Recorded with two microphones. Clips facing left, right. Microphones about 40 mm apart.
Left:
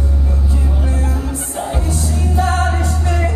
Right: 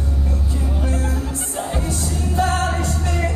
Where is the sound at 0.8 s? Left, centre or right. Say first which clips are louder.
Left 2 dB; centre.